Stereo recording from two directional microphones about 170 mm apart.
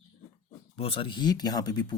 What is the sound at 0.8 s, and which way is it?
Speech, 30° left (ahead or behind).